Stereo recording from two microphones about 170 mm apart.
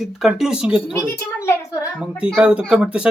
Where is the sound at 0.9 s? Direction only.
15° left (ahead or behind).